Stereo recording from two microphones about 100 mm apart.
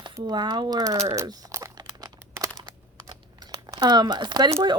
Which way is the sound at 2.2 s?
25° right (ahead or behind).